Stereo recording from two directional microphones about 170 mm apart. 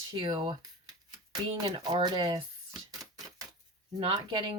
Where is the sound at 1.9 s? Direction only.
25° right (ahead or behind).